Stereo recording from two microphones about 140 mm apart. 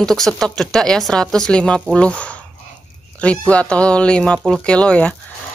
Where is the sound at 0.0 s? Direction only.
5° left (ahead or behind).